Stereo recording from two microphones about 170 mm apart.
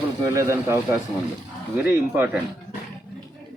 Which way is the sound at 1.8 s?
10° right (ahead or behind).